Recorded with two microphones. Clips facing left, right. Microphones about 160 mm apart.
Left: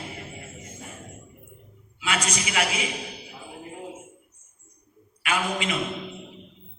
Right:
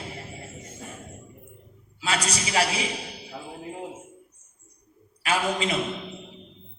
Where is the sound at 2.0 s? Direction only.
35° right (ahead or behind).